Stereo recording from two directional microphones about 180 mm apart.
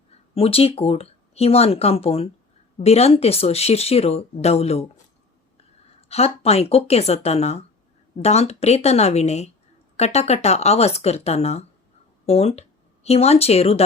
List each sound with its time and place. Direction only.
0.3 s speech: 35° left (ahead or behind)
6.0 s speech: 35° left (ahead or behind)